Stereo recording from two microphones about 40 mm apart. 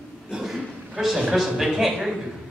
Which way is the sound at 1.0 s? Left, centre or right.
Centre.